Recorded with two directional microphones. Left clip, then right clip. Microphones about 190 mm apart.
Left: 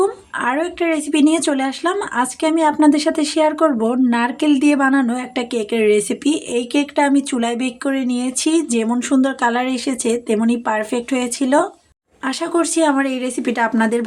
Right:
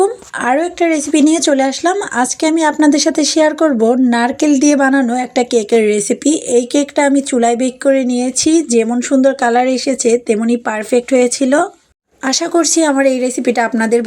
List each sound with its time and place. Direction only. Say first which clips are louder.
0.0 s speech: right 4 dB; 15° right (ahead or behind)